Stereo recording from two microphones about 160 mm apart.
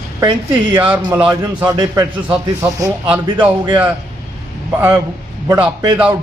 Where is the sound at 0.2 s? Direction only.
20° right (ahead or behind).